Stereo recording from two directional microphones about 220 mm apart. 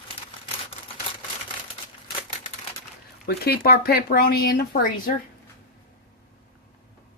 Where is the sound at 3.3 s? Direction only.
45° left (ahead or behind).